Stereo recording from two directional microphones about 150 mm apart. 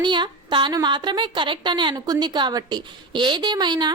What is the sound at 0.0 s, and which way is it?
A woman's voice, 30° right (ahead or behind).